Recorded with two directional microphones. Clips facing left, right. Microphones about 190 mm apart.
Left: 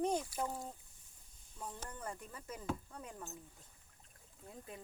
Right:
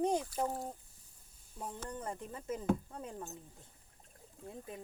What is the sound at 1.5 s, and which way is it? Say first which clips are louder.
Speech: right 5 dB; 20° right (ahead or behind).